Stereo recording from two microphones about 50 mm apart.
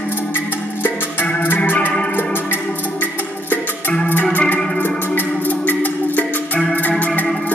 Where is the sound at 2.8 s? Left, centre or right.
Left.